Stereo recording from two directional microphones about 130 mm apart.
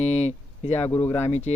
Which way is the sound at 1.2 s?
60° left (ahead or behind).